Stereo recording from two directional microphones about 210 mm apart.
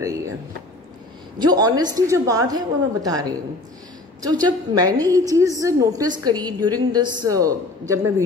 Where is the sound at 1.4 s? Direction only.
20° right (ahead or behind).